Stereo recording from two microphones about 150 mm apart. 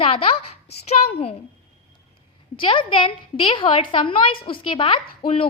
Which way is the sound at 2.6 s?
35° left (ahead or behind).